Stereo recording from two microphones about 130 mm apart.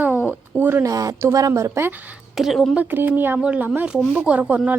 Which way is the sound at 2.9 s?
15° right (ahead or behind).